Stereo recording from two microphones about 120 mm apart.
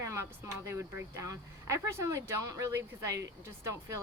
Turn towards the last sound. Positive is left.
turn(degrees=-25)  # may be behind; listen again after turning